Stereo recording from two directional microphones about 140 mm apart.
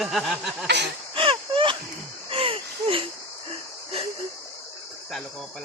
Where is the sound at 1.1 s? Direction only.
40° right (ahead or behind).